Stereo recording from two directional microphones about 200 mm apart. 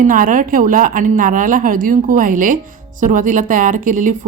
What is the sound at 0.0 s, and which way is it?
A woman's voice, 40° right (ahead or behind).